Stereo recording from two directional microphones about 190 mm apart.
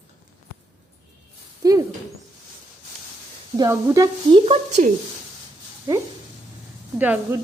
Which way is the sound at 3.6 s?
20° right (ahead or behind).